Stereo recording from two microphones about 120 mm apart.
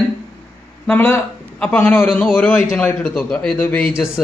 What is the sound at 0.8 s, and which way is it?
A man's voice, 15° left (ahead or behind).